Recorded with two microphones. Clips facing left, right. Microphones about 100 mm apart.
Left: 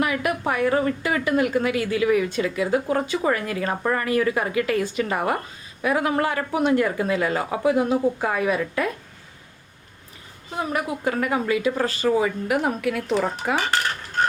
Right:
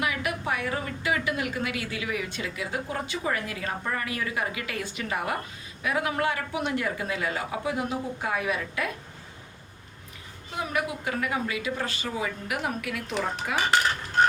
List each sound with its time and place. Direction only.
0.0 s a woman's voice: 45° left (ahead or behind)
10.6 s speech: 35° left (ahead or behind)
13.6 s dishes: 5° right (ahead or behind)